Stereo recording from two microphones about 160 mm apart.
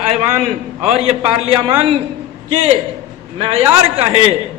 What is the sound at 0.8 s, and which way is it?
Speech, 40° right (ahead or behind).